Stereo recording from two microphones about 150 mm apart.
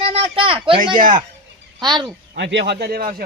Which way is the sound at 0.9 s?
65° right (ahead or behind).